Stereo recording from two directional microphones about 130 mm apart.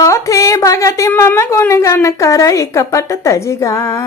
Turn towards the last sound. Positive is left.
turn(degrees=25)  # may be behind; listen again after turning